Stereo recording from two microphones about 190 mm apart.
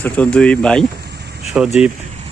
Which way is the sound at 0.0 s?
5° left (ahead or behind).